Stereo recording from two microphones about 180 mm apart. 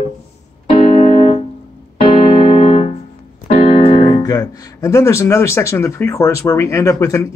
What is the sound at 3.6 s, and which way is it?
Speech, 30° left (ahead or behind).